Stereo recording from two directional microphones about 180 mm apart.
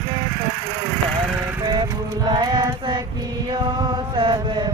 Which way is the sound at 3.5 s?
25° right (ahead or behind).